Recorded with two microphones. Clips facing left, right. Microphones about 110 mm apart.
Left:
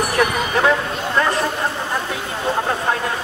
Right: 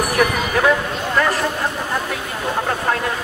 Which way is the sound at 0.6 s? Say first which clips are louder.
Right 1 dB; 30° left (ahead or behind).